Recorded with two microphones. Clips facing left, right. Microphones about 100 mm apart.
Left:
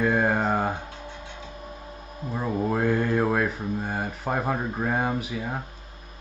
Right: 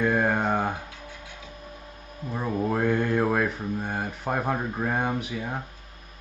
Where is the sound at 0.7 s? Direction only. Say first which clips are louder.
Left 3 dB; 30° left (ahead or behind).